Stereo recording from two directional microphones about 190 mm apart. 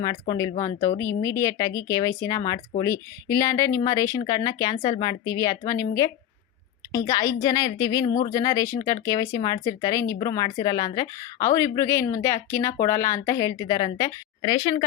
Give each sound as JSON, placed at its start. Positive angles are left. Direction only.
{"t": 0.0, "sound": "a woman's voice", "side_deg": 20}